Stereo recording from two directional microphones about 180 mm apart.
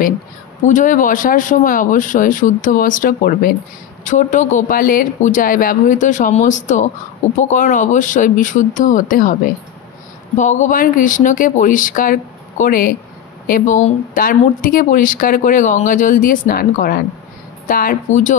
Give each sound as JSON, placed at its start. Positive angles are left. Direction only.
{"t": 0.7, "sound": "speech", "side_deg": 45}